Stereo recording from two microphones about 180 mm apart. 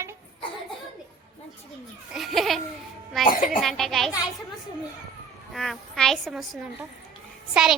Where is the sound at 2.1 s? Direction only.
Centre (ahead or behind).